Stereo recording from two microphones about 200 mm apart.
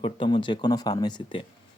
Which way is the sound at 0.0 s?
25° left (ahead or behind).